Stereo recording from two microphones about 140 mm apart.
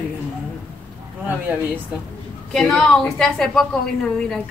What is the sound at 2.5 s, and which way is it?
A woman's voice, 5° left (ahead or behind).